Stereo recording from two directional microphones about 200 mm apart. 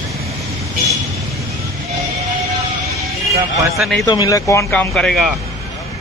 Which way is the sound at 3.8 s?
Centre (ahead or behind).